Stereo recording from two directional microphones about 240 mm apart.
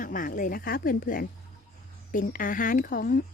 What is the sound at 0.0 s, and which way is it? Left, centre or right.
Speech, left.